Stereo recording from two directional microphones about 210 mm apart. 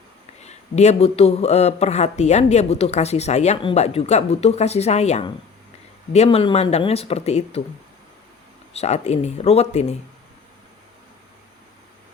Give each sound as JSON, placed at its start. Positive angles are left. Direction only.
{"t": 0.4, "sound": "a man's voice", "side_deg": 30}
{"t": 8.7, "sound": "a man's voice", "side_deg": 30}